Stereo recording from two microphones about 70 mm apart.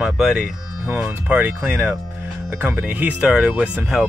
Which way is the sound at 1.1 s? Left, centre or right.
Right.